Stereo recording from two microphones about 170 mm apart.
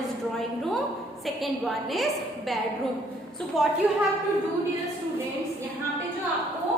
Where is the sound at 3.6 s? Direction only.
Centre (ahead or behind).